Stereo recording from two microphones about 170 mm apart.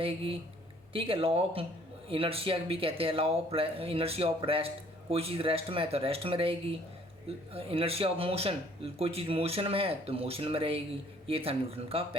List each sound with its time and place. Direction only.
0.0 s a man's voice: 35° right (ahead or behind)